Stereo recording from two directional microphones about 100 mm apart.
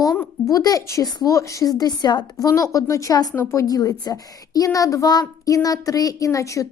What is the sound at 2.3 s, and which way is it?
A child's voice, 35° left (ahead or behind).